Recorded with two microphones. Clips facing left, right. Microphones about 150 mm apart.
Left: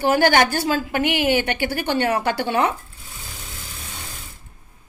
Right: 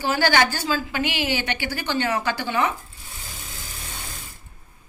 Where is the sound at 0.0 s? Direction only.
50° left (ahead or behind).